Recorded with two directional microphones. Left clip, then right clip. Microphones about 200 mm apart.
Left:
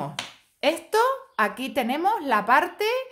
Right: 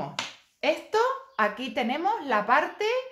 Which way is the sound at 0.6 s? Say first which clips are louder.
Left 3 dB; 50° left (ahead or behind).